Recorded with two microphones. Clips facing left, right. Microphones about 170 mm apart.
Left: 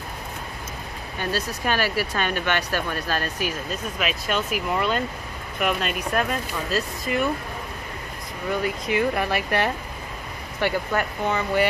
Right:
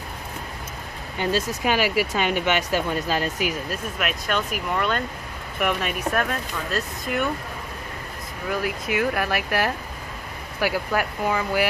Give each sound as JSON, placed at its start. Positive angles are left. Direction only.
{"t": 1.1, "sound": "speech", "side_deg": -20}
{"t": 4.0, "sound": "speech", "side_deg": 5}
{"t": 8.5, "sound": "speech", "side_deg": -5}